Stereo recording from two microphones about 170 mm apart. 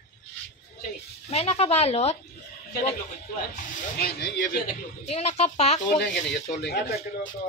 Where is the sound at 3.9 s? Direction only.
70° left (ahead or behind).